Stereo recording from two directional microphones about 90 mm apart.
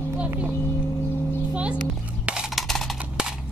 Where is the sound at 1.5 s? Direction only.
10° right (ahead or behind).